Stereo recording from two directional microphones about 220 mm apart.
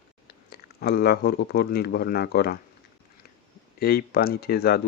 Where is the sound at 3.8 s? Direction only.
45° left (ahead or behind).